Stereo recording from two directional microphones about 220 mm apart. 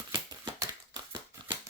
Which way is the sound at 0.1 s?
20° right (ahead or behind).